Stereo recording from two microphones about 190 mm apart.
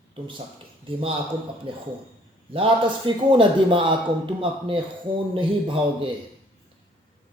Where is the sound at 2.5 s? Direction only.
30° right (ahead or behind).